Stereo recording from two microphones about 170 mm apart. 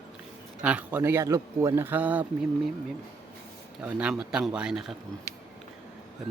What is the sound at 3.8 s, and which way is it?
A man's voice, 5° right (ahead or behind).